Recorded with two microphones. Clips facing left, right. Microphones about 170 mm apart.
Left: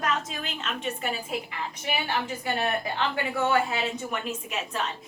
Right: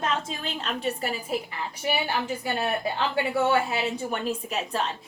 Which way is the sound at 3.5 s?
30° right (ahead or behind).